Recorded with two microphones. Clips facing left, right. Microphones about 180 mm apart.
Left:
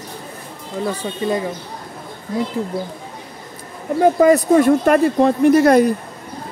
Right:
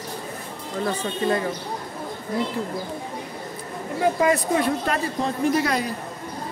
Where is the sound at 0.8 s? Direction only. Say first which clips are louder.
Left 3 dB; 15° left (ahead or behind).